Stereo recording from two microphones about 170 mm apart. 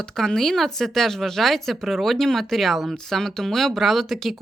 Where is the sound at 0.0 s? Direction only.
5° left (ahead or behind).